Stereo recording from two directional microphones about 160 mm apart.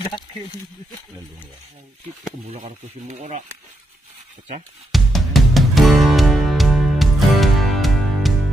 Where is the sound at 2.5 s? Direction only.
45° right (ahead or behind).